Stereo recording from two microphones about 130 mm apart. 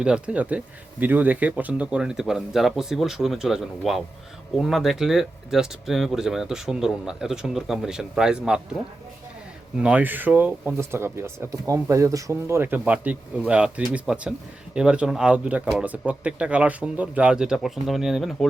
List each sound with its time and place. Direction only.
0.0 s speech: 5° right (ahead or behind)
9.8 s speech: 10° right (ahead or behind)